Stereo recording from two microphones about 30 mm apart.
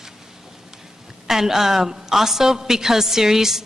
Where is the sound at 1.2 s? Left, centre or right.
Centre.